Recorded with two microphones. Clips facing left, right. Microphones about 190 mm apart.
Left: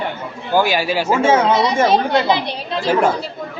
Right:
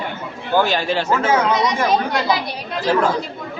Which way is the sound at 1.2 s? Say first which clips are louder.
Left 6 dB; 25° left (ahead or behind).